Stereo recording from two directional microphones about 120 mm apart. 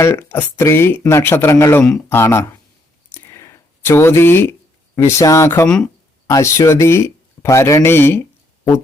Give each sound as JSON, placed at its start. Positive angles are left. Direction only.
{"t": 0.0, "sound": "speech", "side_deg": 20}
{"t": 3.1, "sound": "a sound", "side_deg": 20}
{"t": 4.9, "sound": "speech", "side_deg": 20}
{"t": 5.6, "sound": "speech", "side_deg": 5}
{"t": 6.2, "sound": "speech", "side_deg": 25}